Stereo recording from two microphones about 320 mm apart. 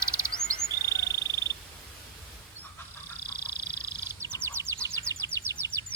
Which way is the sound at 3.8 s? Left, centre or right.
Centre.